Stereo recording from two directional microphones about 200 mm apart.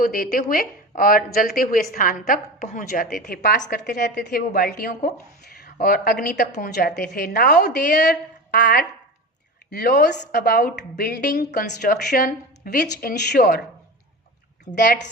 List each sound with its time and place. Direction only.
0.0 s a woman's voice: 45° left (ahead or behind)